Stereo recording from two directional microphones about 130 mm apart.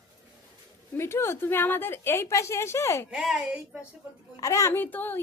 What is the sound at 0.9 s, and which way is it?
A woman's voice, 20° left (ahead or behind).